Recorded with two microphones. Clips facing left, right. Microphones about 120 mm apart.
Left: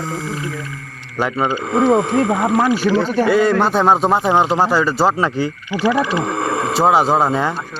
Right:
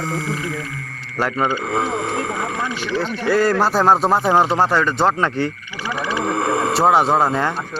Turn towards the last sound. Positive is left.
turn(degrees=0)  # may be behind; listen again after turning